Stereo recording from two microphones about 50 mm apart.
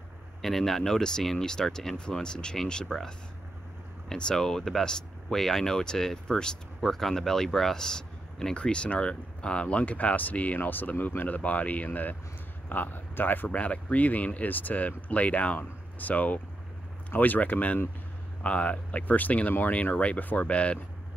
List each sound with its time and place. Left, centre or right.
0.4 s speech: centre; by 13.5 s left
13.5 s speech: left